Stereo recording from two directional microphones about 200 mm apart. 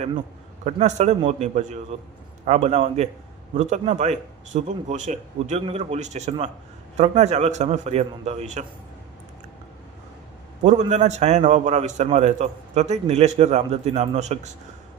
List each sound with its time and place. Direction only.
0.6 s a man's voice: 35° right (ahead or behind)
10.6 s a man's voice: 35° right (ahead or behind)